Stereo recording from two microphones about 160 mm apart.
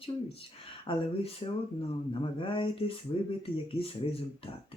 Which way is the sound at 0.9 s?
35° left (ahead or behind).